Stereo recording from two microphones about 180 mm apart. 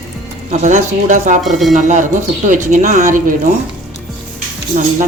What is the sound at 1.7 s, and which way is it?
Speech, 45° right (ahead or behind).